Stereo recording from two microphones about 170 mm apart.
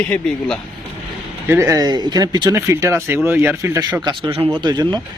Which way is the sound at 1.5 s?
15° right (ahead or behind).